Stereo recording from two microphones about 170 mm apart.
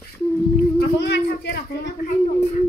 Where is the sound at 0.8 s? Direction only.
80° left.